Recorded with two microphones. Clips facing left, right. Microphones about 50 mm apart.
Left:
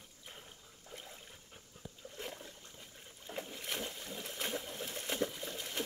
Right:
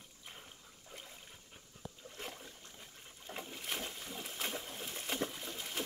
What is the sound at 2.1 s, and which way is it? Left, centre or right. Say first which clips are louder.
Boat: left 3 dB; centre.